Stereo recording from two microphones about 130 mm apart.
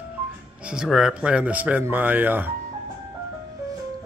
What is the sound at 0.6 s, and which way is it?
Speech, 5° right (ahead or behind).